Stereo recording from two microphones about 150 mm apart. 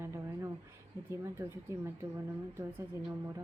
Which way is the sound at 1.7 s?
20° right (ahead or behind).